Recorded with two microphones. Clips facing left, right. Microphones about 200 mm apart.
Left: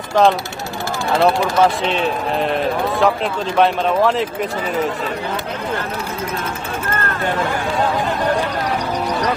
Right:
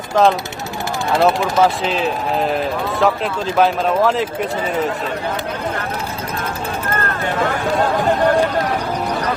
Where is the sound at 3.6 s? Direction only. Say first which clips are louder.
Even; centre (ahead or behind).